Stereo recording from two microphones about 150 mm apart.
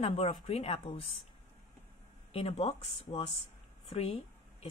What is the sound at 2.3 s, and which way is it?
A woman's voice, 40° left (ahead or behind).